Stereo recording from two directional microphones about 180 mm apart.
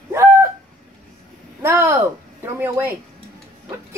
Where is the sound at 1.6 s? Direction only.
10° right (ahead or behind).